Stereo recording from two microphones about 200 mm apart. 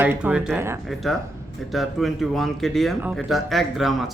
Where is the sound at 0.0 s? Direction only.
10° right (ahead or behind).